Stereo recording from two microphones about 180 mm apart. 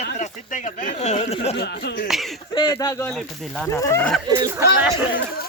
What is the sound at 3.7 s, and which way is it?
Speech, 15° left (ahead or behind).